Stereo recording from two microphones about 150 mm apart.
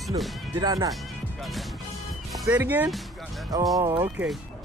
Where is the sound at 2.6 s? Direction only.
10° right (ahead or behind).